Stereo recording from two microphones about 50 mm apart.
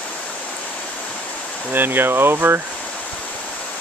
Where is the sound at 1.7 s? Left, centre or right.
Right.